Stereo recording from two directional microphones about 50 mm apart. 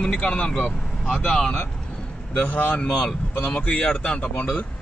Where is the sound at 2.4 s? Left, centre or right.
Left.